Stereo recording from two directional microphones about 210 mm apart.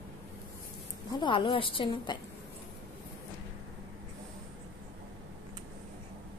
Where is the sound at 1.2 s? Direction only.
25° left (ahead or behind).